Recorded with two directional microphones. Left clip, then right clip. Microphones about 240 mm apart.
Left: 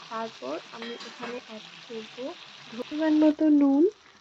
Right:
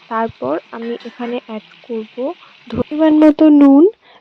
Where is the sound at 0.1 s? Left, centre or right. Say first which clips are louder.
Right 15 dB; right.